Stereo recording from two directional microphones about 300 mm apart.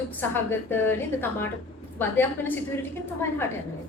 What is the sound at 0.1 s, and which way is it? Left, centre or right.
A woman's voice, centre.